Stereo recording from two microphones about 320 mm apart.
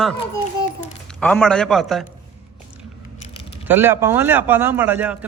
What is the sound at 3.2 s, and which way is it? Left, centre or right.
Keys jangling, centre.